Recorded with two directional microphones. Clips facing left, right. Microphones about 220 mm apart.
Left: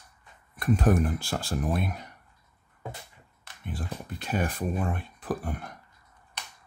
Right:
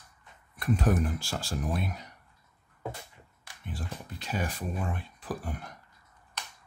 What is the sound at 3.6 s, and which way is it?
Speech, 55° left (ahead or behind).